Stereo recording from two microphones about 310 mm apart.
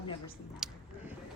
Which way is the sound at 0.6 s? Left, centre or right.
Centre.